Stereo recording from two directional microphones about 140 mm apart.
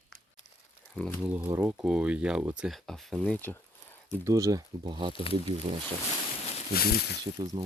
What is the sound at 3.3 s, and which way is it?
Speech, 15° left (ahead or behind).